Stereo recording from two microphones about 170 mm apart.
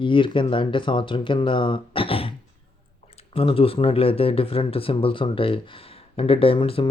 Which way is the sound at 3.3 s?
35° left (ahead or behind).